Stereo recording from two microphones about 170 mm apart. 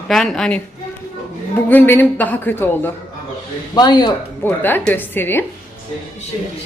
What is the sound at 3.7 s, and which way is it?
Speech, 25° left (ahead or behind).